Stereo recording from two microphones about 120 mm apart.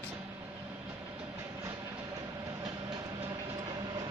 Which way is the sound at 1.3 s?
25° right (ahead or behind).